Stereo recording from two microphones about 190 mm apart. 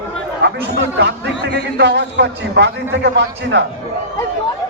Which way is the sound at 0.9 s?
65° right (ahead or behind).